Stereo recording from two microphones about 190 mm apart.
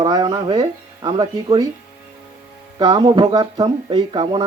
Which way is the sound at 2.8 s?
25° right (ahead or behind).